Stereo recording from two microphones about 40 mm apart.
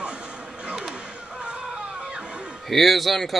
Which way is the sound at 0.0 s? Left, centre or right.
Right.